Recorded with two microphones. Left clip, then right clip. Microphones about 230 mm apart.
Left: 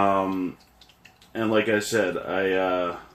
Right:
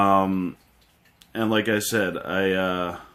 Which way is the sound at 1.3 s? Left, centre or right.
Right.